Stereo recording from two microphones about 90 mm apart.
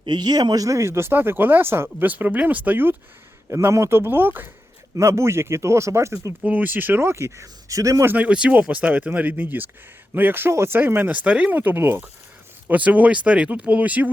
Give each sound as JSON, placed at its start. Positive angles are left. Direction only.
{"t": 0.0, "sound": "speech", "side_deg": -55}
{"t": 3.6, "sound": "speech", "side_deg": -30}
{"t": 6.4, "sound": "speech", "side_deg": -20}
{"t": 8.0, "sound": "speech", "side_deg": -15}